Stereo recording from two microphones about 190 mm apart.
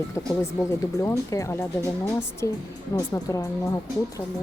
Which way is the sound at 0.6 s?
15° left (ahead or behind).